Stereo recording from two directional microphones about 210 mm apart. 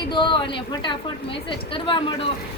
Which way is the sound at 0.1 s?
20° left (ahead or behind).